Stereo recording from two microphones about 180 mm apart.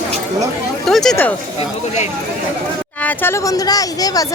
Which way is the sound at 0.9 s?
Centre (ahead or behind).